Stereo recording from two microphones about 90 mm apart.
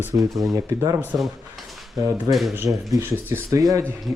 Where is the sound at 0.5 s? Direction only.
40° right (ahead or behind).